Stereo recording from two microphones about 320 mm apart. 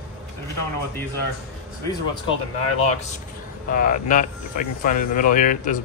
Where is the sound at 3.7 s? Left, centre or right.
Left.